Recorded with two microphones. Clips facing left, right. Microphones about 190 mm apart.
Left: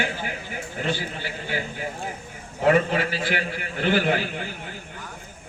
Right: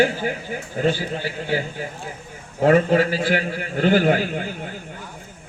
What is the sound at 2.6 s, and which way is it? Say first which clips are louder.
A man's voice: right 4 dB; 40° right (ahead or behind).